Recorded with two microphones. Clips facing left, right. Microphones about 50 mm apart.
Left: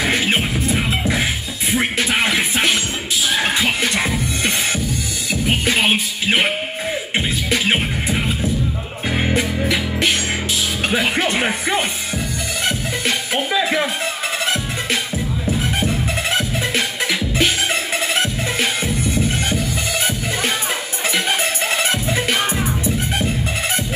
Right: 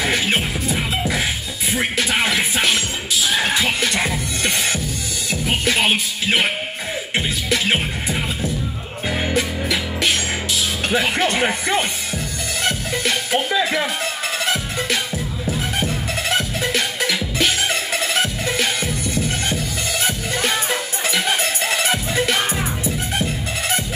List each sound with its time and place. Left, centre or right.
0.0 s beatboxing: centre
1.8 s music: centre
10.9 s music: centre
16.3 s music: centre
21.1 s music: left